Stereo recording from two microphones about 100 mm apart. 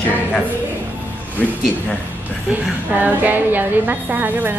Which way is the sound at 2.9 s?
15° right (ahead or behind).